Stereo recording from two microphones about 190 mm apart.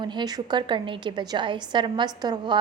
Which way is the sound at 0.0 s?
25° right (ahead or behind).